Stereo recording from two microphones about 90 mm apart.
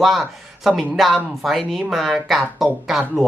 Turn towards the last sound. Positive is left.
turn(degrees=-5)  # may be behind; listen again after turning